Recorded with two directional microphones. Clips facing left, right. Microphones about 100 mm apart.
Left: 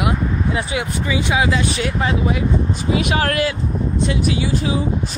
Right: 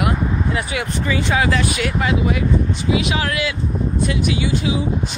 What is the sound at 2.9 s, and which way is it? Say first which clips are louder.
Speech: left 2 dB; 45° left (ahead or behind).